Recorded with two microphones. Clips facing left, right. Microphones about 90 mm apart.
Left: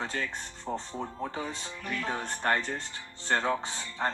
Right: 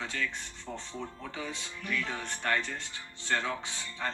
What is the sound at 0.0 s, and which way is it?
Speech, 40° left (ahead or behind).